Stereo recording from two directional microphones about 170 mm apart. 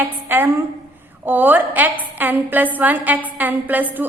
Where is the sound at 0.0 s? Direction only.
15° right (ahead or behind).